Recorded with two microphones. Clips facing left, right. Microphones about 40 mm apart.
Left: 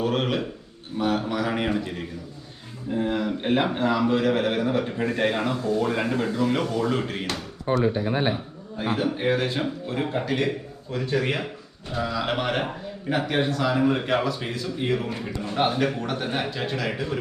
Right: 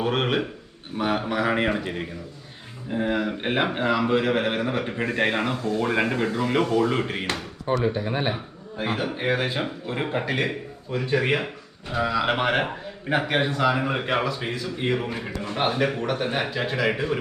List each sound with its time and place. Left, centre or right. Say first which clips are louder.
0.0 s a man's voice: right 1 dB; right
8.0 s a man's voice: left 2 dB; centre
14.3 s a man's voice: even; centre
14.8 s speech: even; right
16.0 s a man's voice: right 2 dB; centre
16.9 s speech: right 3 dB; right